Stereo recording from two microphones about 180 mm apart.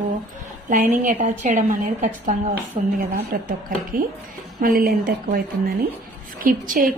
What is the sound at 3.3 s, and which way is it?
Speech, 55° right (ahead or behind).